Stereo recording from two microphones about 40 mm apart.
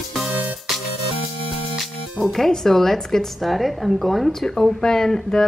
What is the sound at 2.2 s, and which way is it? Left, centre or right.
A woman's voice, centre.